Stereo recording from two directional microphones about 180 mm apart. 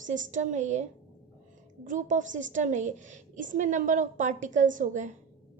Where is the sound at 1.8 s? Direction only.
45° right (ahead or behind).